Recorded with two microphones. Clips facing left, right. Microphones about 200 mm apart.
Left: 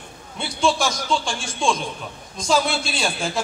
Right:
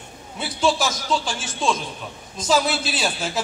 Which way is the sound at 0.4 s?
5° right (ahead or behind).